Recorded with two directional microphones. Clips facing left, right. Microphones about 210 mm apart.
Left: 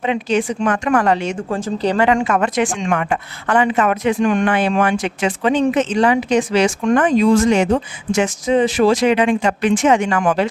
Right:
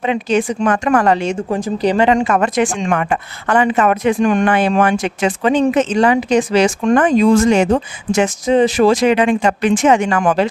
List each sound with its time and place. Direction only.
0.0 s a woman's voice: 45° right (ahead or behind)
1.5 s speech: 15° right (ahead or behind)
2.2 s a woman's voice: 40° right (ahead or behind)